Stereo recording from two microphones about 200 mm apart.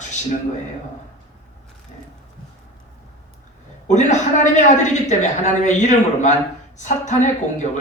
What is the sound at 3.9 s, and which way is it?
A woman's voice, 35° left (ahead or behind).